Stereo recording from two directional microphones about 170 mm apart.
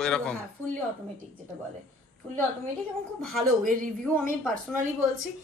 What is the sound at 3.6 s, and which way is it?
Speech, 50° right (ahead or behind).